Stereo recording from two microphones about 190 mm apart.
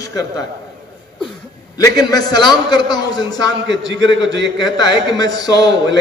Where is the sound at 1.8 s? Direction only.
20° left (ahead or behind).